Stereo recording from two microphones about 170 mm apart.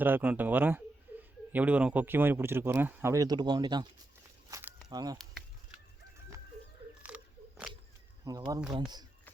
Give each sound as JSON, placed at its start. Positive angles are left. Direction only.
{"t": 0.0, "sound": "speech", "side_deg": -10}
{"t": 1.1, "sound": "chuckle", "side_deg": -10}
{"t": 1.5, "sound": "speech", "side_deg": -10}
{"t": 4.4, "sound": "walk", "side_deg": -20}
{"t": 4.9, "sound": "speech", "side_deg": -25}
{"t": 7.0, "sound": "a sound", "side_deg": -5}
{"t": 8.2, "sound": "speech", "side_deg": -20}